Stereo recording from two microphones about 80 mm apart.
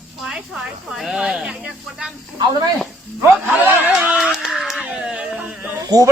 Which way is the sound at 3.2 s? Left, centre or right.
Right.